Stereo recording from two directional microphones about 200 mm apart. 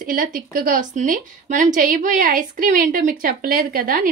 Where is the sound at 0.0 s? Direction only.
45° right (ahead or behind).